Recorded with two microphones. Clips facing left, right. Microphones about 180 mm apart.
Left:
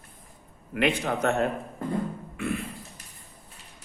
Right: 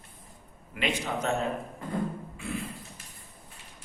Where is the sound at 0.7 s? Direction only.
55° left (ahead or behind).